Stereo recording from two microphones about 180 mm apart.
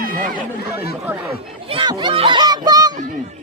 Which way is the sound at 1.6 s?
30° right (ahead or behind).